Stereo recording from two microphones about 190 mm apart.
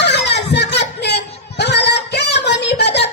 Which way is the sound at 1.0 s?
65° left (ahead or behind).